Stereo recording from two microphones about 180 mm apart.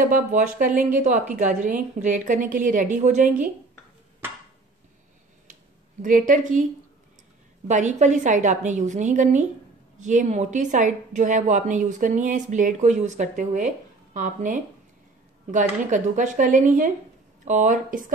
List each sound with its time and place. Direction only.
0.0 s speech: 50° right (ahead or behind)
6.0 s speech: 45° right (ahead or behind)
7.6 s speech: 40° right (ahead or behind)